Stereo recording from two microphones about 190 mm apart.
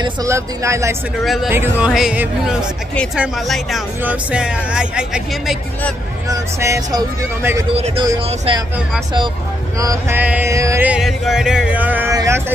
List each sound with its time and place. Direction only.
0.0 s music: 15° right (ahead or behind)
1.2 s speech: centre (ahead or behind)
6.2 s music: 15° right (ahead or behind)
7.7 s speech: 30° right (ahead or behind)
9.8 s music: 15° right (ahead or behind)